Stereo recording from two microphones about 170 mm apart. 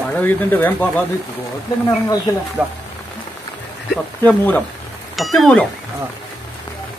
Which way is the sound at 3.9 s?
10° left (ahead or behind).